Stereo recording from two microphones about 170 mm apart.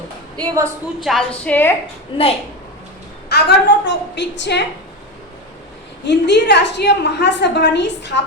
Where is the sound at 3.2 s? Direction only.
75° left (ahead or behind).